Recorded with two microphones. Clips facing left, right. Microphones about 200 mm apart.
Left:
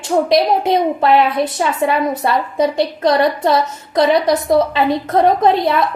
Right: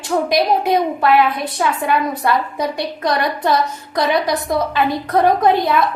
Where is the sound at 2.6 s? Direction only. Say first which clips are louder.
Left 6 dB; 25° left (ahead or behind).